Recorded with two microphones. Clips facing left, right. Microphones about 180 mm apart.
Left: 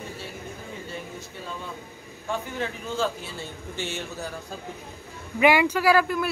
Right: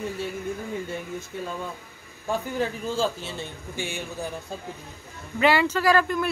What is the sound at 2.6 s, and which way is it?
Speech, 30° right (ahead or behind).